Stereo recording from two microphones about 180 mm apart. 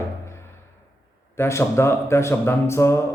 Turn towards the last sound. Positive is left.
turn(degrees=15)  # may be behind; listen again after turning